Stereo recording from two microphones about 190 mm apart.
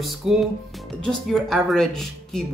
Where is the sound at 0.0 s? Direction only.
Centre (ahead or behind).